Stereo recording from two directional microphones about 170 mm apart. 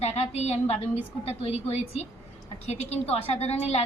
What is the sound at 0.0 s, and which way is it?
A woman's voice, 40° left (ahead or behind).